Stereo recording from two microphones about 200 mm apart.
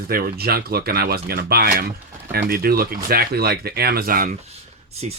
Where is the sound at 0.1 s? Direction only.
50° right (ahead or behind).